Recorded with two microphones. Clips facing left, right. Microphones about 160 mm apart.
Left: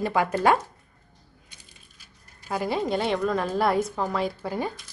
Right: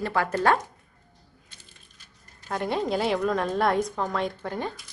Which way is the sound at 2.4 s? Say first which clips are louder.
Left 1 dB; 5° left (ahead or behind).